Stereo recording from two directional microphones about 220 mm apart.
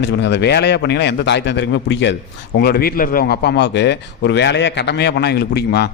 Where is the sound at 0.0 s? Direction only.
50° left (ahead or behind).